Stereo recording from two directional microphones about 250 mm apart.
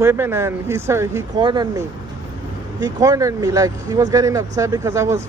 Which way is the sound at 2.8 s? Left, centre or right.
Centre.